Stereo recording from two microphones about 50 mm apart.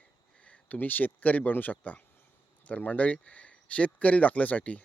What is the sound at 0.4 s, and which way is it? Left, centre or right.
Speech, left.